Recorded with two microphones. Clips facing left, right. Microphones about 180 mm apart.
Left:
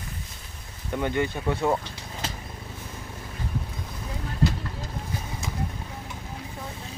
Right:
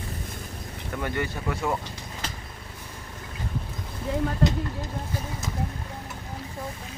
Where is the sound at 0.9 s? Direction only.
20° left (ahead or behind).